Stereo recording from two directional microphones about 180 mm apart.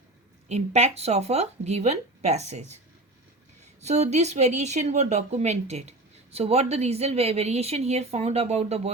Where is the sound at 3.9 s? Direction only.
40° right (ahead or behind).